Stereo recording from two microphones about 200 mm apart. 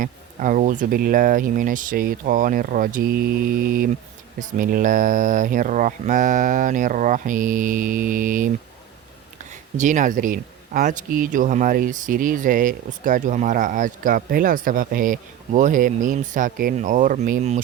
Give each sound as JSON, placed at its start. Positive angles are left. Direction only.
{"t": 0.0, "sound": "speech", "side_deg": -40}
{"t": 9.7, "sound": "speech", "side_deg": -40}